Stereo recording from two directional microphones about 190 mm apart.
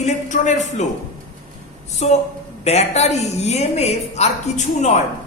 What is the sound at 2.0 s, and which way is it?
A woman's voice, 35° left (ahead or behind).